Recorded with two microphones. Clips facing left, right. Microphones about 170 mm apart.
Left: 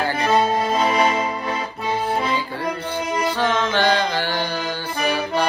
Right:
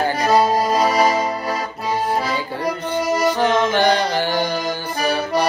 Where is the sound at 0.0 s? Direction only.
35° right (ahead or behind).